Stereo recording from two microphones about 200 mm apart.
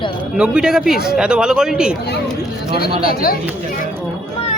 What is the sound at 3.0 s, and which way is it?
Speech, 45° left (ahead or behind).